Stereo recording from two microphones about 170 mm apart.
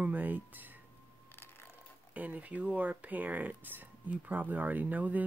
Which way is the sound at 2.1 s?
10° right (ahead or behind).